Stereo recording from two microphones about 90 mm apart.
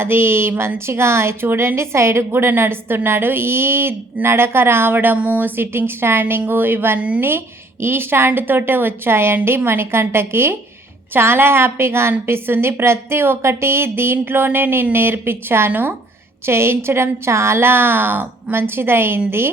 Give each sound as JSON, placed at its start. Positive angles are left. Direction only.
{"t": 0.0, "sound": "a woman's voice", "side_deg": -25}